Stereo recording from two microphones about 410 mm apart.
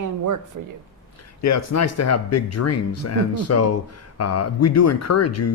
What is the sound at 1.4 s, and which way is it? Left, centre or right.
Speech, left.